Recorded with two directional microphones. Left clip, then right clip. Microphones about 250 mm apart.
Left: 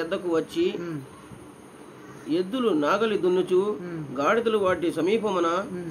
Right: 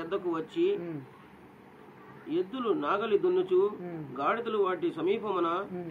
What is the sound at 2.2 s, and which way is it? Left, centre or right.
Speech, left.